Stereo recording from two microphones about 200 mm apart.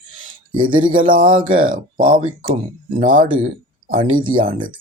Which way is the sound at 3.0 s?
40° right (ahead or behind).